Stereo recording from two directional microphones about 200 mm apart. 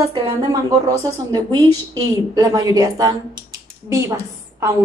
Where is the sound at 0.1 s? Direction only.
20° right (ahead or behind).